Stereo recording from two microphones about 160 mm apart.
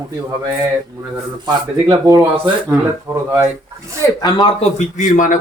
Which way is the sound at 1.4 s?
20° right (ahead or behind).